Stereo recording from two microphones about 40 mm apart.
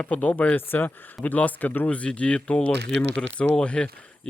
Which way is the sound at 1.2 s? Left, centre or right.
Left.